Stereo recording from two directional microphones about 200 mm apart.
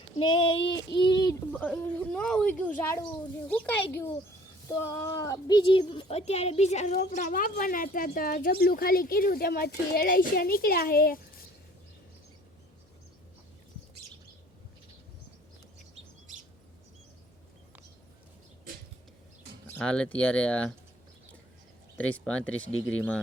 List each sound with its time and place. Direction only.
0.2 s a sound: 25° left (ahead or behind)
1.5 s speech: 10° left (ahead or behind); by 11.2 s 50° left (ahead or behind)
19.8 s speech: 5° left (ahead or behind)
21.9 s speech: 5° left (ahead or behind)